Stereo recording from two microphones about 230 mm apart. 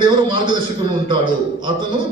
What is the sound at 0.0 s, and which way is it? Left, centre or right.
Speech, right.